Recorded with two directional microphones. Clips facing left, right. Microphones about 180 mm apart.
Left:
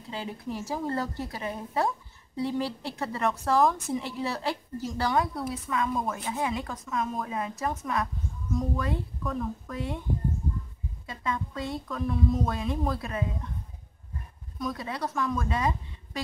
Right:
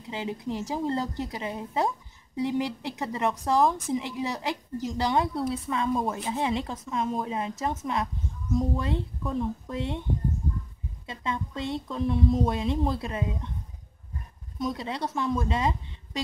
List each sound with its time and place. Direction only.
0.1 s a woman's voice: 20° right (ahead or behind)
11.1 s a woman's voice: 25° right (ahead or behind)
14.6 s speech: 25° right (ahead or behind)